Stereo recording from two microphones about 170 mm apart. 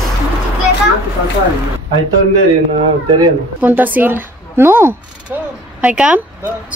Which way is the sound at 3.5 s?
10° right (ahead or behind).